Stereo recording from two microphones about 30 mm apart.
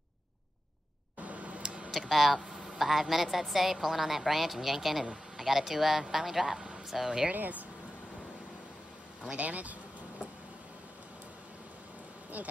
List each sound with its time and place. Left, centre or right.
1.2 s a sound: right
1.6 s a sound: right
1.9 s a woman's voice: centre
7.3 s speech: right
9.4 s speech: right
12.4 s speech: right